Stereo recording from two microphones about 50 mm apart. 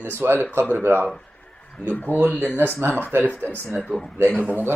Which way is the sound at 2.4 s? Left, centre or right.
Right.